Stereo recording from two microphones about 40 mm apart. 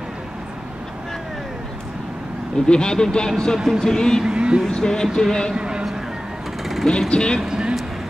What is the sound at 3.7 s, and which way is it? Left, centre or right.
Speech, centre.